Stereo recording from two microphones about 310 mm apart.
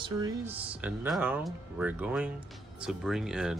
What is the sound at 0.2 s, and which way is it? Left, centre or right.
Speech, centre.